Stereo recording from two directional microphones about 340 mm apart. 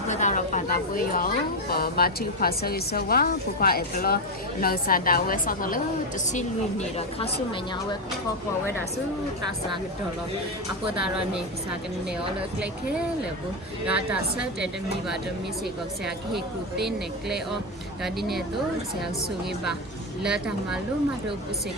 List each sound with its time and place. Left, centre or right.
0.1 s a sound: left
1.7 s a woman's voice: left
13.8 s a woman's voice: centre
16.8 s a woman's voice: centre
20.2 s a woman's voice: centre